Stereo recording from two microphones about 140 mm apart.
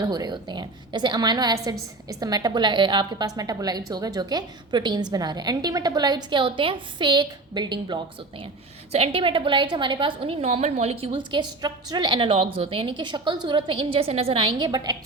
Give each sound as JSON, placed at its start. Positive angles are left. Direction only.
{"t": 0.1, "sound": "a woman's voice", "side_deg": -30}
{"t": 8.9, "sound": "a woman's voice", "side_deg": -45}